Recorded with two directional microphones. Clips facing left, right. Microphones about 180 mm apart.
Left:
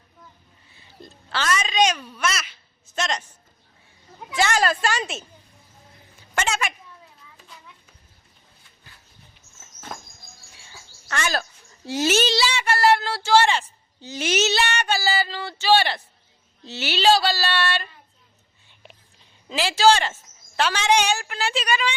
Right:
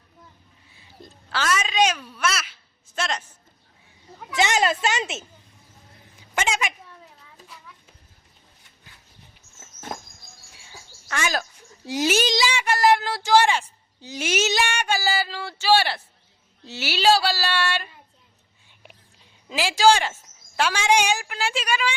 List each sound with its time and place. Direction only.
1.0 s speech: 10° right (ahead or behind)
2.9 s a sound: 5° right (ahead or behind)
4.4 s a woman's voice: 20° right (ahead or behind)
6.3 s a sound: 15° right (ahead or behind)
11.1 s speech: 10° right (ahead or behind)
19.5 s speech: 10° right (ahead or behind)